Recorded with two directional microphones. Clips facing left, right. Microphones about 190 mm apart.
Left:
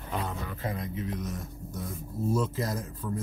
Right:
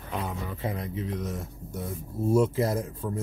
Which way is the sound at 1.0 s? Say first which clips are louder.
Right 2 dB; 25° right (ahead or behind).